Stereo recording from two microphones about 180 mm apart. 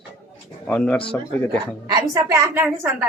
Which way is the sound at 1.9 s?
20° right (ahead or behind).